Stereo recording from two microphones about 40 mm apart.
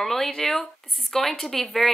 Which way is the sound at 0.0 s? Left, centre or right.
Centre.